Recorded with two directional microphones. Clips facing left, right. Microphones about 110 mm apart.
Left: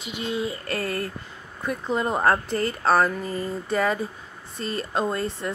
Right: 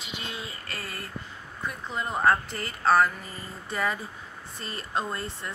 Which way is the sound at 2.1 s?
35° left (ahead or behind).